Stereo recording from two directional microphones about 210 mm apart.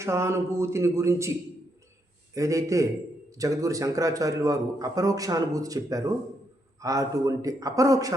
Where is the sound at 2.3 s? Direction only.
15° right (ahead or behind).